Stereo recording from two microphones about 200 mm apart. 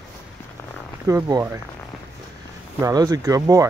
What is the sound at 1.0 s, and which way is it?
Speech, 15° right (ahead or behind).